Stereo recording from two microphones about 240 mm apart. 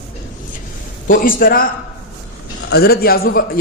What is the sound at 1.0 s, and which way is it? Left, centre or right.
A man's voice, left.